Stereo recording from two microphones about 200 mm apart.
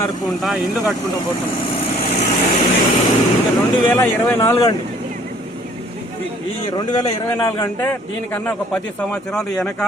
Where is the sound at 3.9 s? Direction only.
10° left (ahead or behind).